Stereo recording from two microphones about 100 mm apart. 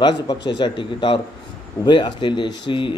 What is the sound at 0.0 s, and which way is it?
Speech, 50° left (ahead or behind).